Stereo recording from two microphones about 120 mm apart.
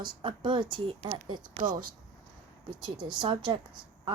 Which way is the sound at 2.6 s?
40° right (ahead or behind).